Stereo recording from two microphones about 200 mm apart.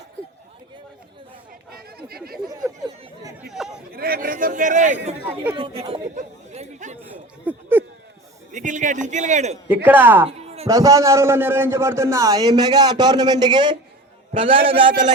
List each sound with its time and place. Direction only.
1.7 s a sound: 50° right (ahead or behind)
3.5 s chatter: centre (ahead or behind)
3.9 s a man's voice: 45° right (ahead or behind)
5.5 s chatter: 25° right (ahead or behind)
7.0 s a sound: 10° right (ahead or behind)
8.5 s a man's voice: 40° right (ahead or behind)
9.6 s a man's voice: 10° right (ahead or behind)
10.2 s a sound: 30° right (ahead or behind)
10.7 s a man's voice: 15° right (ahead or behind)